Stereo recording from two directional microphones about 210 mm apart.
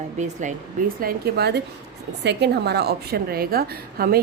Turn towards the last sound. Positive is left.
turn(degrees=-45)  # may be behind; listen again after turning